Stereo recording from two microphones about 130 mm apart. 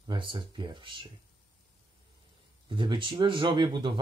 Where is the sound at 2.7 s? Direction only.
40° right (ahead or behind).